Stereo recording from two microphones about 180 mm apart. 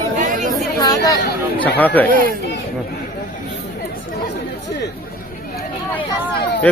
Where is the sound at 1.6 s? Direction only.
10° left (ahead or behind).